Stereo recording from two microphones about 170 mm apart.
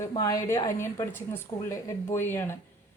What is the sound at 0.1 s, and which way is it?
A woman's voice, 20° left (ahead or behind).